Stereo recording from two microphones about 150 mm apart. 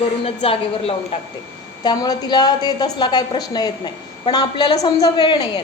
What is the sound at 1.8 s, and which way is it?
A woman's voice, 25° left (ahead or behind).